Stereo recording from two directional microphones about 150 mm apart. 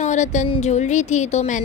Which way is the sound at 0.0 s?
55° left (ahead or behind).